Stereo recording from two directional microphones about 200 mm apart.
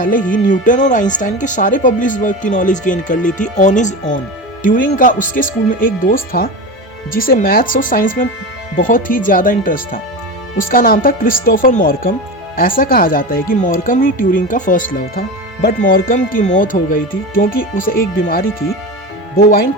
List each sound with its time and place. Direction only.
0.0 s speech: 45° left (ahead or behind)